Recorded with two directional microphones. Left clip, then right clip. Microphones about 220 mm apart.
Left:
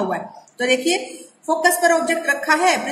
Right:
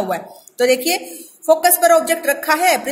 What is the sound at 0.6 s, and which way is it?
A woman's voice, 50° right (ahead or behind).